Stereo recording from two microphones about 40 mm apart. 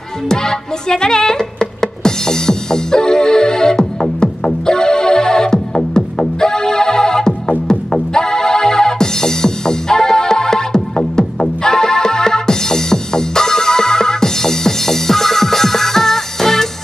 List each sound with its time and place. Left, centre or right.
0.3 s music: centre